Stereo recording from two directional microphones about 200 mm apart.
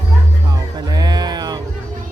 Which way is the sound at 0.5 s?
20° right (ahead or behind).